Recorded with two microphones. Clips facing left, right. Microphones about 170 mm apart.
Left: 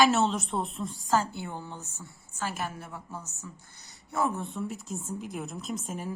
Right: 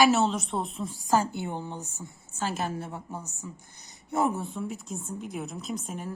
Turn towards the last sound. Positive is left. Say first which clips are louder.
# even
turn(degrees=0)  # may be behind; listen again after turning